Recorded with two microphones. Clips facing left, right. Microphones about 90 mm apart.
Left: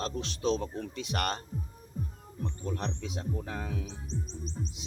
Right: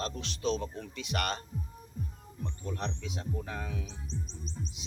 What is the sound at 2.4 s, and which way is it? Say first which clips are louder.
Speech: left 2 dB; 40° left (ahead or behind).